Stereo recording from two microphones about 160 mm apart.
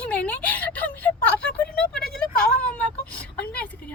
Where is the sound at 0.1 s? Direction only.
10° left (ahead or behind).